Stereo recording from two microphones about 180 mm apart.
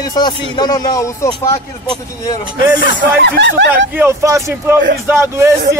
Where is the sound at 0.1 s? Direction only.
25° left (ahead or behind).